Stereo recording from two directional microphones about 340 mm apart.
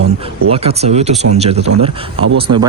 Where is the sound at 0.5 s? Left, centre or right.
Centre.